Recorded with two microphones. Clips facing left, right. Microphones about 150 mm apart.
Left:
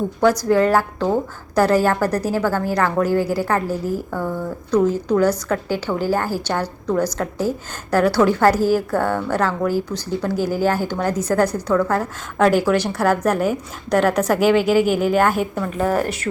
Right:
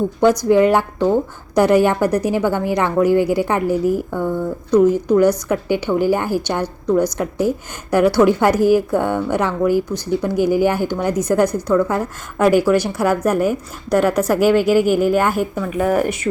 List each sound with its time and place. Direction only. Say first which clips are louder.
0.2 s a woman's voice: right 3 dB; 20° right (ahead or behind)